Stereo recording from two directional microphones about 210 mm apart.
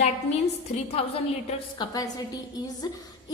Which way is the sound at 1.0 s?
25° left (ahead or behind).